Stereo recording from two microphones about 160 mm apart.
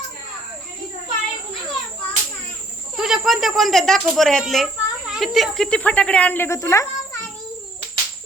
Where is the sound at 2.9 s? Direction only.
5° right (ahead or behind); by 6.9 s 20° left (ahead or behind).